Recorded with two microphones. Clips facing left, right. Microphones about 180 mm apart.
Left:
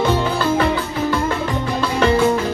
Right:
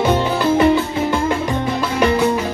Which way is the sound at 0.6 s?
20° right (ahead or behind).